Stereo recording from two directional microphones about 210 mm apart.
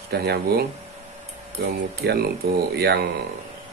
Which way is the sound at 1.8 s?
50° right (ahead or behind).